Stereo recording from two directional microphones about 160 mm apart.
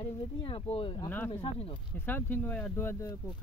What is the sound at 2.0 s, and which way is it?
Speech, 10° left (ahead or behind).